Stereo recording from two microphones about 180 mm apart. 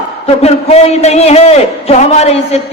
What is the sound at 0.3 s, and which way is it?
A man's voice, 35° left (ahead or behind).